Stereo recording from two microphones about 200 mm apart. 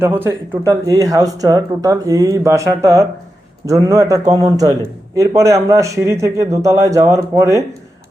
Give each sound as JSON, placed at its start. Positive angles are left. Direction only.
{"t": 0.0, "sound": "a man's voice", "side_deg": -10}